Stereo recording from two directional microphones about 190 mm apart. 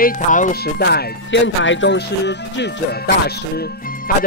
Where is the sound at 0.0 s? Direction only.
45° left (ahead or behind).